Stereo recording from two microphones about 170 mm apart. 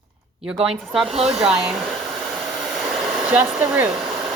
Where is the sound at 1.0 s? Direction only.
35° right (ahead or behind).